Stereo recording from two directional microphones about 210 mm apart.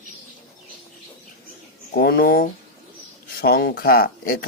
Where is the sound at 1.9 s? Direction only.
45° left (ahead or behind).